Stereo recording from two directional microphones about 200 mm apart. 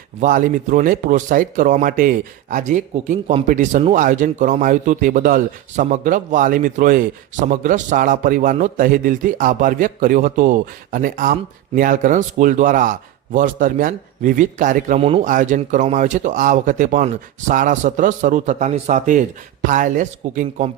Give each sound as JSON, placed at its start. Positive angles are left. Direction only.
{"t": 0.2, "sound": "speech", "side_deg": -40}